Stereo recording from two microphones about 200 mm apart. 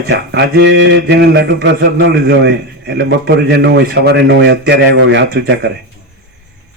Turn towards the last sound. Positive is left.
turn(degrees=-55)  # may be behind; listen again after turning